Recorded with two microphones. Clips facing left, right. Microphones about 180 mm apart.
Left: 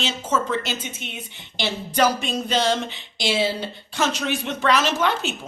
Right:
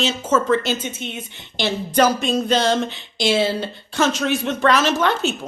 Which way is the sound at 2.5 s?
15° left (ahead or behind).